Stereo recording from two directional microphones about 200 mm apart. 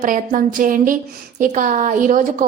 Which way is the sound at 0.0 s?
40° right (ahead or behind).